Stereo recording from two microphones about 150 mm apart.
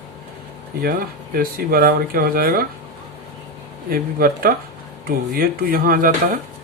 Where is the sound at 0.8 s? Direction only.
75° right (ahead or behind).